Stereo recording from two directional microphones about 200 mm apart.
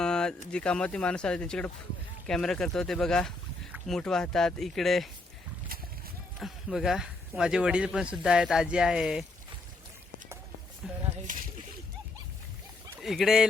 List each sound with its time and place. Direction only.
0.0 s a sound: 5° left (ahead or behind)
0.5 s speech: 5° left (ahead or behind)
6.4 s speech: centre (ahead or behind)
10.8 s speech: 5° right (ahead or behind)
11.3 s speech: 40° right (ahead or behind)
13.0 s speech: centre (ahead or behind)